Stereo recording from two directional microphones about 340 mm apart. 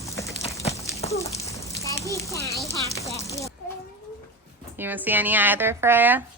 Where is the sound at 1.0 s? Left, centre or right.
Centre.